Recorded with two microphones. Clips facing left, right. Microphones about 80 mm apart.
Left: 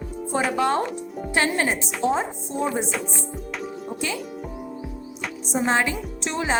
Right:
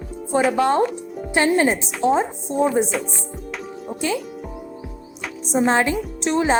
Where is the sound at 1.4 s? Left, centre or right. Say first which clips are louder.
Right 6 dB; right.